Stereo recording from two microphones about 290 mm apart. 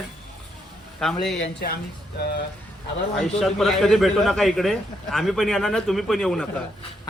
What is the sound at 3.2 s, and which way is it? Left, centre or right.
A man's voice, centre.